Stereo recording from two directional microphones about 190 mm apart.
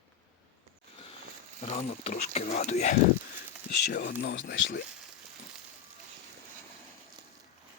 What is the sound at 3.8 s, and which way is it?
Speech, 60° left (ahead or behind).